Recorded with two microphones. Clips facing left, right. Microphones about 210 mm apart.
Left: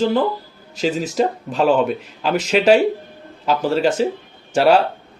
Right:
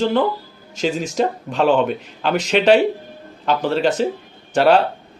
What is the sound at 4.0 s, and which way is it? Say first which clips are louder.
Speech: left 1 dB; 5° left (ahead or behind).